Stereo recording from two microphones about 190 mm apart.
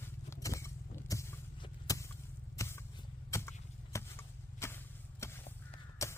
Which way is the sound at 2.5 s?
15° left (ahead or behind).